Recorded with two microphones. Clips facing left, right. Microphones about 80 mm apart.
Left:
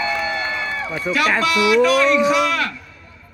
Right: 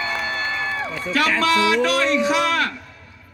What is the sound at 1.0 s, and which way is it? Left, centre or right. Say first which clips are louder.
A man's voice: left 2 dB; right.